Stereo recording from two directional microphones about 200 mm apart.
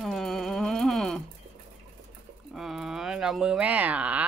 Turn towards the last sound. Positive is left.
turn(degrees=-5)  # may be behind; listen again after turning